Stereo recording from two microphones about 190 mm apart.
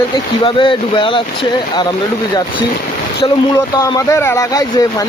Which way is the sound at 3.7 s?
15° left (ahead or behind).